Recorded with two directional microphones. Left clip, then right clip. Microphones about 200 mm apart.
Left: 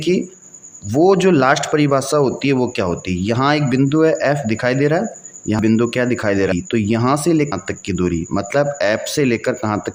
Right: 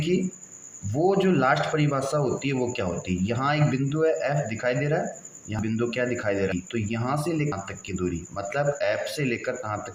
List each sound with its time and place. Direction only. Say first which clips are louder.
0.9 s speech: left 10 dB; 50° left (ahead or behind)